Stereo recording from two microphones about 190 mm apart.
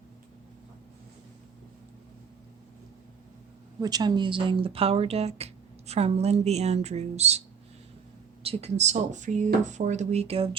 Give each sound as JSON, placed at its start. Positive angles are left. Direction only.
{"t": 3.8, "sound": "speech", "side_deg": -20}
{"t": 8.4, "sound": "speech", "side_deg": -35}